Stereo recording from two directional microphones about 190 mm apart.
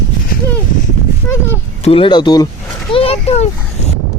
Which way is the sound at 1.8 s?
30° left (ahead or behind).